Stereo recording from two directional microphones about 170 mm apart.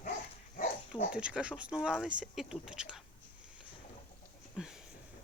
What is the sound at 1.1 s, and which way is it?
Speech, 5° right (ahead or behind).